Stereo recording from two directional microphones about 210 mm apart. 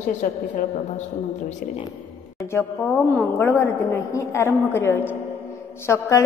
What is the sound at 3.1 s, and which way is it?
A woman's voice, 10° left (ahead or behind).